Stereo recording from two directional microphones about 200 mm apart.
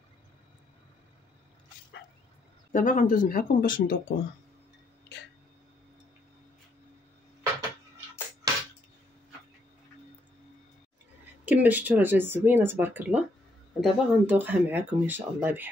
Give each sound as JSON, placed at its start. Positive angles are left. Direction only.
{"t": 2.7, "sound": "speech", "side_deg": 40}
{"t": 8.4, "sound": "a sound", "side_deg": -20}
{"t": 11.4, "sound": "speech", "side_deg": -10}